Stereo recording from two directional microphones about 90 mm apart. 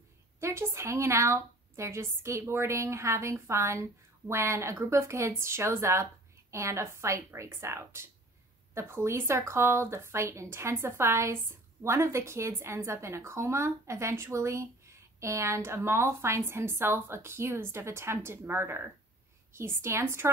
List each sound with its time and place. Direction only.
0.4 s a woman's voice: 30° right (ahead or behind)